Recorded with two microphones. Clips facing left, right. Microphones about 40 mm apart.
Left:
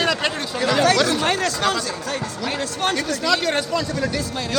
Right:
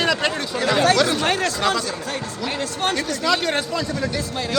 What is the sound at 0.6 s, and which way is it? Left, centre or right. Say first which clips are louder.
Speech: even; right.